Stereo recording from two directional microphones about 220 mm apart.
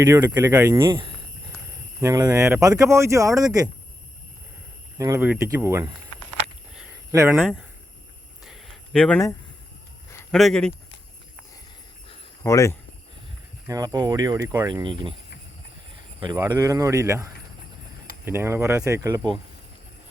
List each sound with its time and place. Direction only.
0.0 s speech: 15° right (ahead or behind)
4.9 s speech: 15° right (ahead or behind)
7.1 s speech: 15° right (ahead or behind)
7.3 s speech: centre (ahead or behind)
8.4 s a sound: centre (ahead or behind)
10.3 s speech: centre (ahead or behind)
12.4 s speech: 15° left (ahead or behind)
13.7 s speech: 15° right (ahead or behind)
16.5 s speech: 15° right (ahead or behind)
18.3 s speech: 10° right (ahead or behind)